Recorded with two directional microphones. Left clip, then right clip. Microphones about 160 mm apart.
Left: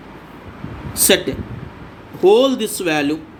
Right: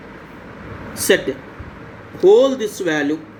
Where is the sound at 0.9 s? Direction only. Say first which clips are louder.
Left 1 dB; 65° left (ahead or behind).